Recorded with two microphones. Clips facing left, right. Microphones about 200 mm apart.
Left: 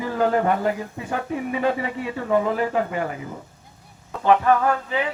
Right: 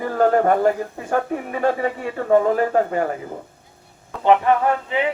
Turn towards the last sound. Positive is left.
turn(degrees=-25)  # may be behind; listen again after turning